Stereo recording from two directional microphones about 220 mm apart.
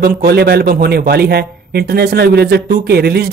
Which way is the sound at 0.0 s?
45° right (ahead or behind).